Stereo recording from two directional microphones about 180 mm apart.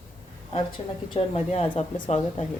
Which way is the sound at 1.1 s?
35° left (ahead or behind).